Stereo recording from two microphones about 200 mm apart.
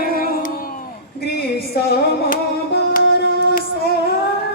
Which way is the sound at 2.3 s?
45° left (ahead or behind).